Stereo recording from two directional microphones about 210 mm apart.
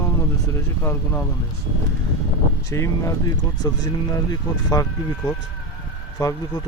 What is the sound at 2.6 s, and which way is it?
Speech, 15° left (ahead or behind).